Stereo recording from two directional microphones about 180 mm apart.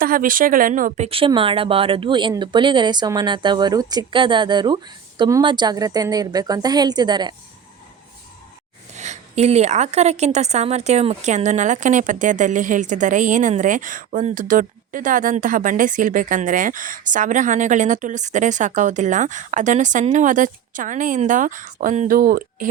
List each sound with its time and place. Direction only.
0.0 s speech: 50° right (ahead or behind); by 7.3 s 25° right (ahead or behind)
9.0 s a woman's voice: 40° right (ahead or behind)